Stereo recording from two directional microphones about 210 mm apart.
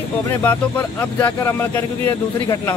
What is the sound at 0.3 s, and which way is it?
Speech, 10° left (ahead or behind).